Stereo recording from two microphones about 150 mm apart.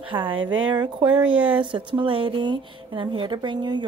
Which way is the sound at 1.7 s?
35° right (ahead or behind).